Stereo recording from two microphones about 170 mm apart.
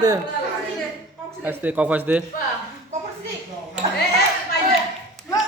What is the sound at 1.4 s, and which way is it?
Speech, 10° right (ahead or behind).